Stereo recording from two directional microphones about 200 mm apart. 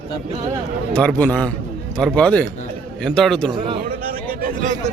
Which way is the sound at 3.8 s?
45° right (ahead or behind).